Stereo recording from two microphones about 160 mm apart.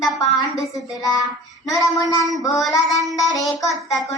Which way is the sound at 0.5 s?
20° left (ahead or behind).